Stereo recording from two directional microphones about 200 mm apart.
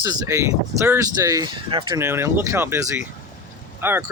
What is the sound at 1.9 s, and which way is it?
Speech, 10° right (ahead or behind).